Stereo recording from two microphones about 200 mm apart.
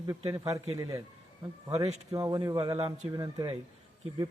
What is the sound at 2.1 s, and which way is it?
A man's voice, 20° right (ahead or behind).